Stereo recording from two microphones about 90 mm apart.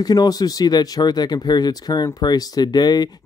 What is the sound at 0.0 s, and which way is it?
Speech, 45° left (ahead or behind).